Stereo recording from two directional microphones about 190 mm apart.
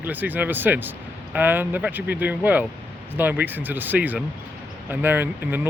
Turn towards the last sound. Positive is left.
turn(degrees=-10)  # may be behind; listen again after turning